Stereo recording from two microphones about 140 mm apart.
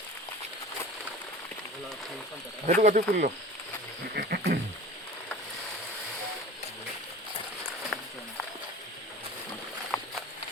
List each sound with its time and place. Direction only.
2.6 s speech: 65° right (ahead or behind)
4.2 s frog: 90° right
7.9 s walk: 5° left (ahead or behind)
9.9 s a sound: 5° left (ahead or behind)